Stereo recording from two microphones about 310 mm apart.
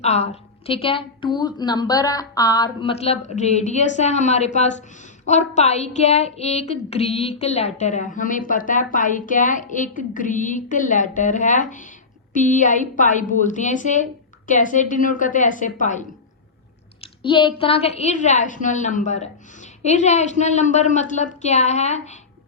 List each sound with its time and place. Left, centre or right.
0.0 s a woman's voice: left